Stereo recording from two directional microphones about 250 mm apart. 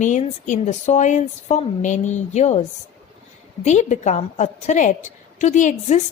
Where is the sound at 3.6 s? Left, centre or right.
Left.